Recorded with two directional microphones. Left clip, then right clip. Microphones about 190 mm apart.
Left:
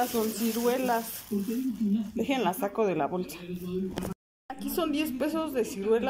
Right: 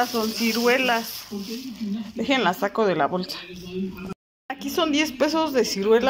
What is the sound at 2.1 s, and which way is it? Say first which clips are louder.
Speech: right 8 dB; 10° left (ahead or behind).